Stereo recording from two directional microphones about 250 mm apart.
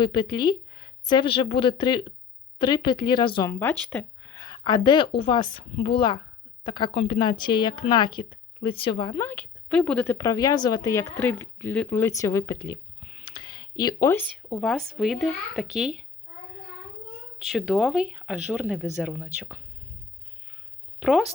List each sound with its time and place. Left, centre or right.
0.0 s a woman's voice: centre
17.4 s speech: centre
21.0 s speech: centre